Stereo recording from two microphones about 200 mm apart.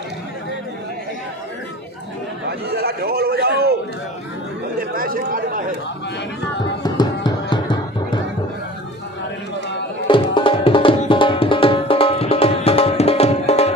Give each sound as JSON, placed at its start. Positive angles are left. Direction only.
{"t": 2.7, "sound": "a man's voice", "side_deg": -50}
{"t": 4.7, "sound": "speech", "side_deg": -45}
{"t": 6.8, "sound": "music", "side_deg": 20}
{"t": 10.0, "sound": "music", "side_deg": 25}